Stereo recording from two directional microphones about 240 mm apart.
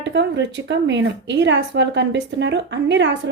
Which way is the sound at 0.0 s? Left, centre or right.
Right.